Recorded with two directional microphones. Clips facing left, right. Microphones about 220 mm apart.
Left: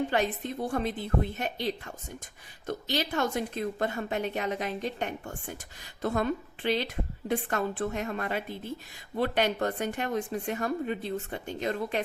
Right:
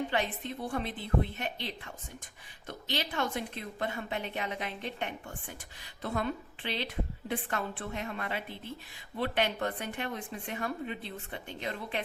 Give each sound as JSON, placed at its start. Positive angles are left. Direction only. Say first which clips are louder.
{"t": 0.1, "sound": "a woman's voice", "louder": "left 4 dB", "side_deg": 45}